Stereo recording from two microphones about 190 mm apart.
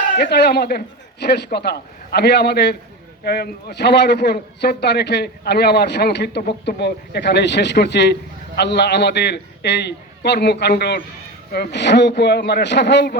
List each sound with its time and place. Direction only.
0.2 s a man's voice: 60° left (ahead or behind)